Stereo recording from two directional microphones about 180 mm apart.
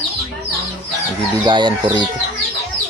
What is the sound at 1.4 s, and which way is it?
Speech, 25° right (ahead or behind).